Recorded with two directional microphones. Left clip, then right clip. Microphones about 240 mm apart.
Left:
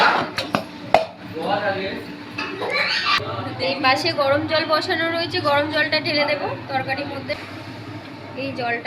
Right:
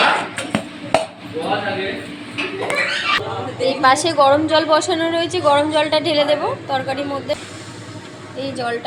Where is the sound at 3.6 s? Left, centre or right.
Centre.